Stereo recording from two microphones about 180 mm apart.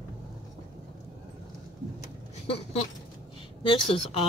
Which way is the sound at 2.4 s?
35° left (ahead or behind).